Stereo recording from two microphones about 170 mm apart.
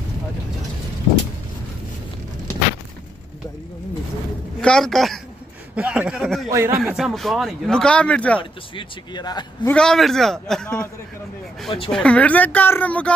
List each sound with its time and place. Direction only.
4.6 s speech: 5° left (ahead or behind)
6.5 s speech: 15° right (ahead or behind)
6.8 s speech: centre (ahead or behind)
8.4 s speech: 25° left (ahead or behind)
9.7 s speech: 5° left (ahead or behind)
11.9 s speech: 5° left (ahead or behind)